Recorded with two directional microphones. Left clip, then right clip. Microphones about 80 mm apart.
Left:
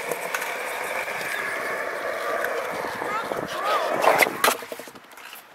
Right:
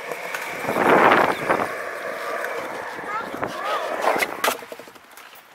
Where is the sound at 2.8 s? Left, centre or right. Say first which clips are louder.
Left 1 dB; left.